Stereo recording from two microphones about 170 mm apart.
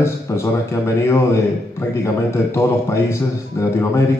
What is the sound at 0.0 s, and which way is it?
A man's voice, 15° left (ahead or behind).